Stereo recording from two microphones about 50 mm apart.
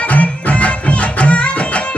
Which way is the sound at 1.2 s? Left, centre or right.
Left.